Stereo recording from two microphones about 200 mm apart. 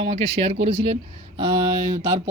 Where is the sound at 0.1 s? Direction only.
30° right (ahead or behind).